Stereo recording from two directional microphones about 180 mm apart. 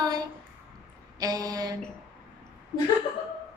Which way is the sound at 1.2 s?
20° right (ahead or behind).